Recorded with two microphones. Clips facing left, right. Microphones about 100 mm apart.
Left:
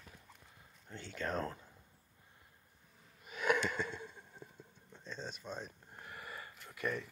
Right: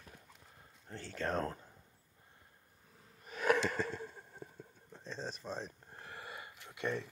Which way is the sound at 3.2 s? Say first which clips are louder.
Right 2 dB; 40° right (ahead or behind).